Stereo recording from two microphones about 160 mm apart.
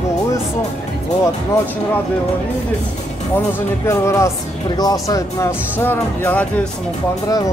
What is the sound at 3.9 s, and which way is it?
Speech, 20° left (ahead or behind).